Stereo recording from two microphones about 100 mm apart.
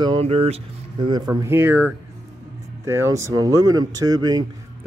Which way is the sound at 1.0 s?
45° right (ahead or behind).